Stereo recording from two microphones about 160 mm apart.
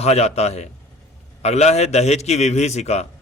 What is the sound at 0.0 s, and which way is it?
A man's voice, 40° left (ahead or behind).